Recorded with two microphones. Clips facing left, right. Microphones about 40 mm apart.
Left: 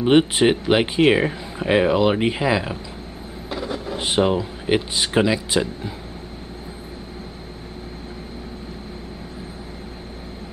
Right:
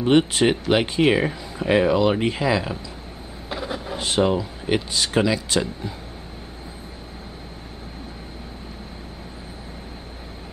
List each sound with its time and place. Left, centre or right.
0.0 s speech: centre
3.4 s a sound: centre
4.0 s speech: centre